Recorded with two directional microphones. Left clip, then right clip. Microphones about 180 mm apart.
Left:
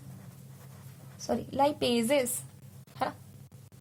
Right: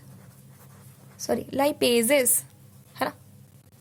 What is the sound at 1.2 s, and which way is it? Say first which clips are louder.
A woman's voice: right 3 dB; 50° right (ahead or behind).